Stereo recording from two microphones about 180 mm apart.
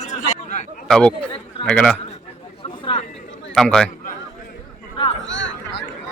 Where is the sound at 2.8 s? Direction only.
30° left (ahead or behind).